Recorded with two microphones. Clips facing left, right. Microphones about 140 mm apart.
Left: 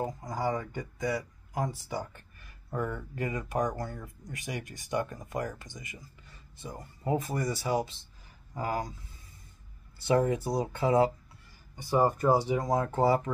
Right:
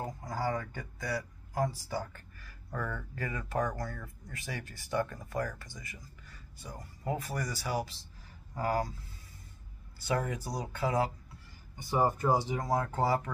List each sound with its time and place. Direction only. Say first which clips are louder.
0.0 s speech: left 3 dB; 20° left (ahead or behind)
10.0 s speech: left 7 dB; 25° left (ahead or behind)
12.3 s speech: left 4 dB; 15° left (ahead or behind)